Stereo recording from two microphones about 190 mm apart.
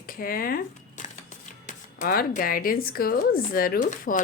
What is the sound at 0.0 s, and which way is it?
Speech, 50° left (ahead or behind).